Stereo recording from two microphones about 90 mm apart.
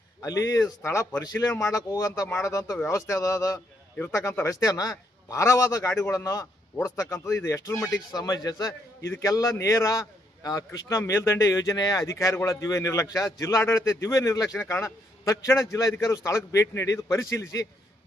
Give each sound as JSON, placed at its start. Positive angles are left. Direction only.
{"t": 0.2, "sound": "speech", "side_deg": 40}
{"t": 0.8, "sound": "speech", "side_deg": 25}
{"t": 1.3, "sound": "a man's voice", "side_deg": 40}
{"t": 8.1, "sound": "a man's voice", "side_deg": 45}